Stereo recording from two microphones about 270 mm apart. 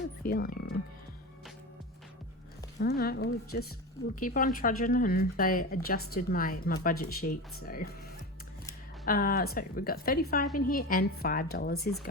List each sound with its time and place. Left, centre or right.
0.2 s speech: left
2.7 s speech: left
9.0 s speech: left